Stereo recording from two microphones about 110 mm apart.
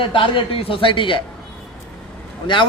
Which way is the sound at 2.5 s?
50° left (ahead or behind).